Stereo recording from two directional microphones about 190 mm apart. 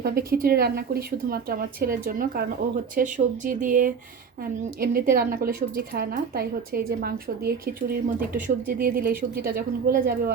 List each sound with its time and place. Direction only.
0.0 s a woman's voice: 50° right (ahead or behind)